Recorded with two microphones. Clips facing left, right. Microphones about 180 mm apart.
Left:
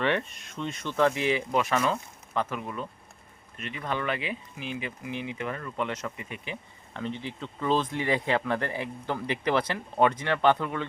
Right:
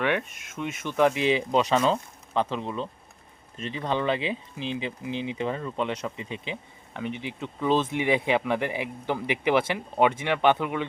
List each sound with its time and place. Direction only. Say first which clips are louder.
0.0 s speech: right 1 dB; 5° right (ahead or behind)